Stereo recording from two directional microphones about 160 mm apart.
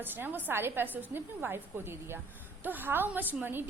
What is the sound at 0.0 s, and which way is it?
A woman's voice, 10° right (ahead or behind).